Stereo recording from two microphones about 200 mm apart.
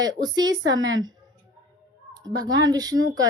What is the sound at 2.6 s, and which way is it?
Speech, 20° right (ahead or behind).